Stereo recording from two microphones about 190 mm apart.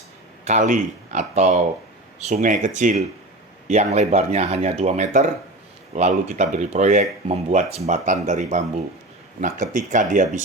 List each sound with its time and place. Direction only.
0.4 s speech: 40° right (ahead or behind)